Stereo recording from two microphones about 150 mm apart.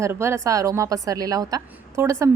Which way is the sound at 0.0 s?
20° right (ahead or behind).